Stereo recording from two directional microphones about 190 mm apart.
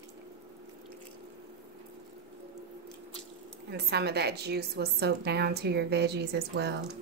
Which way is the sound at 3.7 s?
60° right (ahead or behind).